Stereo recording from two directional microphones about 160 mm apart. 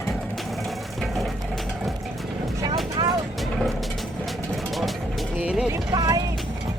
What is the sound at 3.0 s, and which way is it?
Vehicle, 25° right (ahead or behind).